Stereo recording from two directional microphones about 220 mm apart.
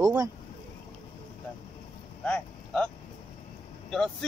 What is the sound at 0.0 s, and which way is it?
Vehicle, 15° right (ahead or behind).